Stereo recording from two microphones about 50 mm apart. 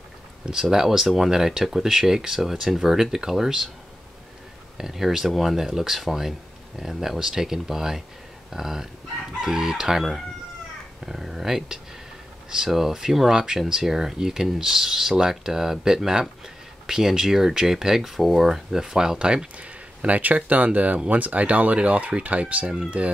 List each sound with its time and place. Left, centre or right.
0.5 s speech: centre
4.7 s speech: centre; by 23.1 s right